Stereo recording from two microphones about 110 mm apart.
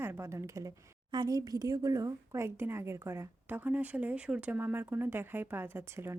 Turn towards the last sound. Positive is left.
turn(degrees=-20)  # may be behind; listen again after turning